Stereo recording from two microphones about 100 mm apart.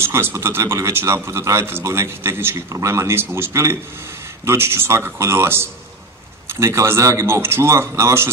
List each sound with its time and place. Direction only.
0.0 s speech: 25° right (ahead or behind)